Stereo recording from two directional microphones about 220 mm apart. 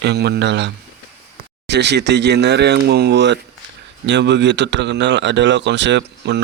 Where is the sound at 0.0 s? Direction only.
50° right (ahead or behind).